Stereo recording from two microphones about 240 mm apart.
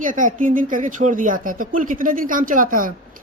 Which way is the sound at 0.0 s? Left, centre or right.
Right.